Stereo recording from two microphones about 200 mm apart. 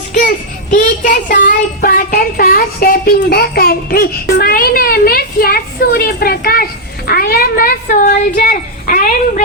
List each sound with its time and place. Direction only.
0.1 s child singing: 40° left (ahead or behind)
7.1 s speech: 50° left (ahead or behind)